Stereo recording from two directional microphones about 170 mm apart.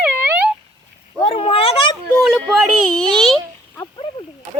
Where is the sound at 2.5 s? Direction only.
5° left (ahead or behind).